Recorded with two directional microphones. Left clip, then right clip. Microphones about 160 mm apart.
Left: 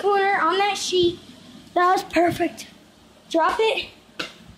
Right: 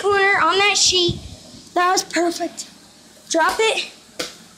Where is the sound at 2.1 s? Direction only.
25° left (ahead or behind).